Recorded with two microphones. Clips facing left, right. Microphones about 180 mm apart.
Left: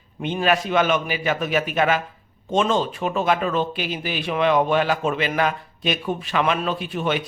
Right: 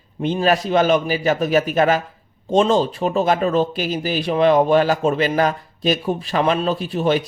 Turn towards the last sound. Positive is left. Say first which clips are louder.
# right 5 dB
turn(degrees=-35)  # may be behind; listen again after turning